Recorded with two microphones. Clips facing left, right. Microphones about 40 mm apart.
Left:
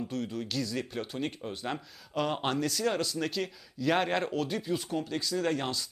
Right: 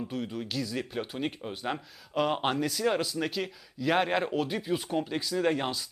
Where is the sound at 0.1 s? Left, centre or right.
Centre.